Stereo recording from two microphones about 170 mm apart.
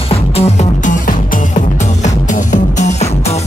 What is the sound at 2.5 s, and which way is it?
Music, 40° left (ahead or behind).